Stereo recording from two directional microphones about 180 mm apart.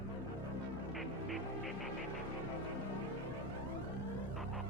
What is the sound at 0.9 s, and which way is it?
Music, centre (ahead or behind).